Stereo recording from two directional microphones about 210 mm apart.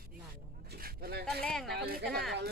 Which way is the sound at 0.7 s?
45° right (ahead or behind).